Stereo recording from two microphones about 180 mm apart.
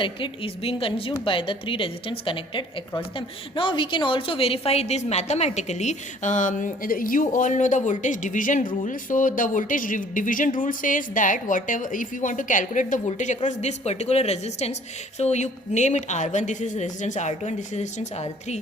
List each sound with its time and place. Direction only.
0.0 s a woman's voice: 30° left (ahead or behind)